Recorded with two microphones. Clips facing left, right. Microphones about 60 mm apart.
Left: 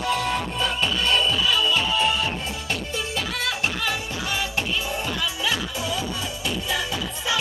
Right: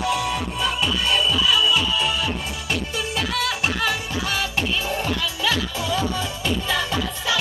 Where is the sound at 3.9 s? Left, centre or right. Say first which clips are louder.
Right 2 dB; left.